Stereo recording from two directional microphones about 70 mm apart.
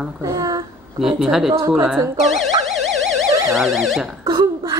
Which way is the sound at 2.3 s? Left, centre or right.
Centre.